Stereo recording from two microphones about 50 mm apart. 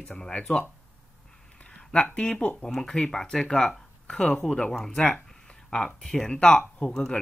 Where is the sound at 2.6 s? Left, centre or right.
Centre.